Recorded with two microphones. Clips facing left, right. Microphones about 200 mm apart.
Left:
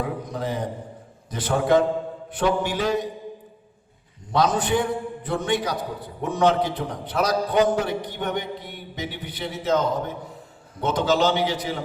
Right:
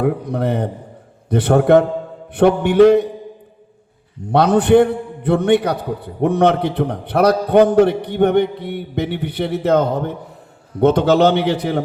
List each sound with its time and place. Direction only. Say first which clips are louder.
0.0 s a man's voice: right 9 dB; 60° right (ahead or behind)
4.3 s a man's voice: right 9 dB; 60° right (ahead or behind)